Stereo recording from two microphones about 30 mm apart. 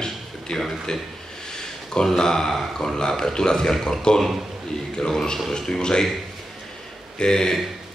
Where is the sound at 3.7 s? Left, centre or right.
Centre.